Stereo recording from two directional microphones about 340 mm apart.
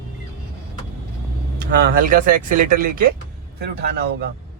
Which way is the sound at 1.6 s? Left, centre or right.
Right.